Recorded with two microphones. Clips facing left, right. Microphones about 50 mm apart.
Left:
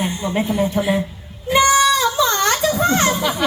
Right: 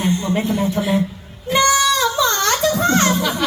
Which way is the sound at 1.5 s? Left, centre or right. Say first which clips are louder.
Left 2 dB; centre.